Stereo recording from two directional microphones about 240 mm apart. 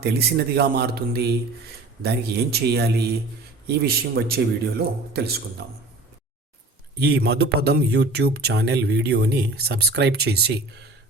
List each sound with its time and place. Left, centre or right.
0.0 s speech: right
7.0 s speech: right